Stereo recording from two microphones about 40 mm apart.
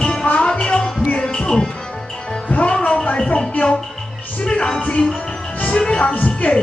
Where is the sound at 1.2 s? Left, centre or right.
Centre.